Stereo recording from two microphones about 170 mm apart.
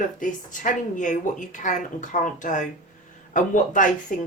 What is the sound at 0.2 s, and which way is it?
Speech, 50° left (ahead or behind).